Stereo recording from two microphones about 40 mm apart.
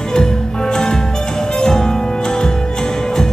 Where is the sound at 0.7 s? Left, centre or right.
Centre.